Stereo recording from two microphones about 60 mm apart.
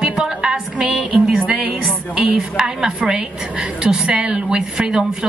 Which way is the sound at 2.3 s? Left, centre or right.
Centre.